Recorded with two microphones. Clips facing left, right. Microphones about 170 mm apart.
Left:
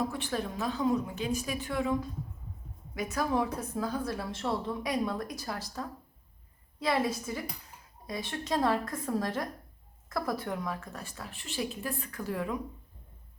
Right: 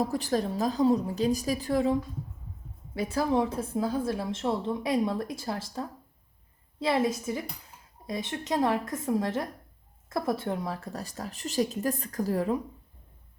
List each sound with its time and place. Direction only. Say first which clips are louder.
0.0 s a woman's voice: right 5 dB; 40° right (ahead or behind)